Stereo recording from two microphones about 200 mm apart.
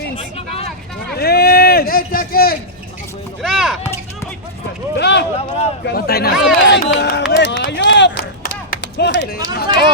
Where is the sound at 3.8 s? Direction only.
15° left (ahead or behind).